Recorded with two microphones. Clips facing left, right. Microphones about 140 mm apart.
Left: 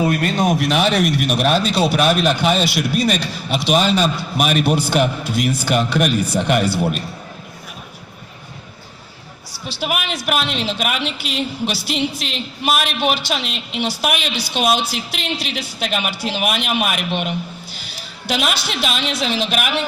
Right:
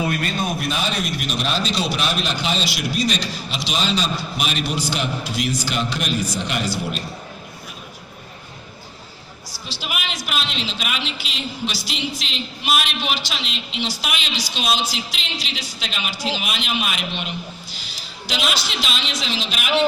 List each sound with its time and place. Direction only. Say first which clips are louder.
0.2 s a man's voice: left 7 dB; 90° left; by 7.0 s 55° left (ahead or behind)
9.6 s a man's voice: left 7 dB; 50° left (ahead or behind)